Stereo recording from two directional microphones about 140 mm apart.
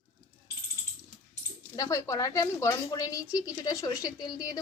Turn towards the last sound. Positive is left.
turn(degrees=30)  # may be behind; listen again after turning